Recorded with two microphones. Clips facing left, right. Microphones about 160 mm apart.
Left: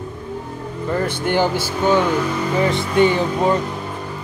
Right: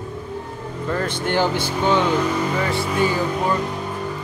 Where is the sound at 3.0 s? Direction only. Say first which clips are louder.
Left 7 dB; 25° left (ahead or behind).